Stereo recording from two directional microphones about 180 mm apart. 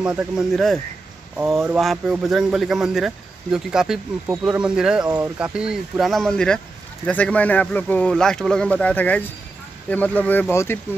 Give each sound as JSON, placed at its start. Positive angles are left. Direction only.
{"t": 0.0, "sound": "speech", "side_deg": -5}
{"t": 5.0, "sound": "speech", "side_deg": -20}
{"t": 5.4, "sound": "speech", "side_deg": -5}